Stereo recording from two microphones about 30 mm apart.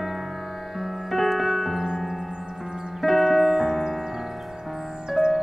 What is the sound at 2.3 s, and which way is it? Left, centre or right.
Music, right.